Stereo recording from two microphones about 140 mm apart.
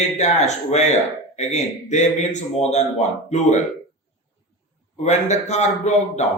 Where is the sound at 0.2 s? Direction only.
55° left (ahead or behind).